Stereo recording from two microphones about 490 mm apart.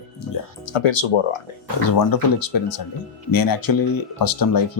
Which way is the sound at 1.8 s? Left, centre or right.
Left.